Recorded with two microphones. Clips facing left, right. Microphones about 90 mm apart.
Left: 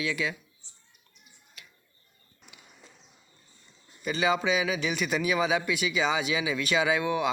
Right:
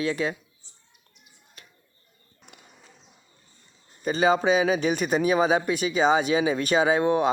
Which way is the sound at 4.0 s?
40° right (ahead or behind).